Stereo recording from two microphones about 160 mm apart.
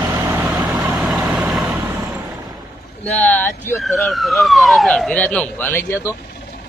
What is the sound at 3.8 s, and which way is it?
Speech, centre (ahead or behind).